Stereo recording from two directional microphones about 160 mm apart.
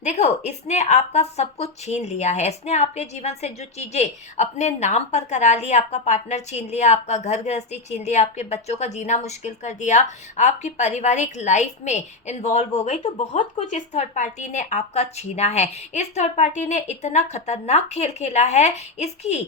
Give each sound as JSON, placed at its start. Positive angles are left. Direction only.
{"t": 0.0, "sound": "speech", "side_deg": 45}